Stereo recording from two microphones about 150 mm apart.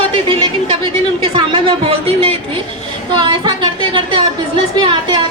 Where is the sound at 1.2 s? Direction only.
35° right (ahead or behind).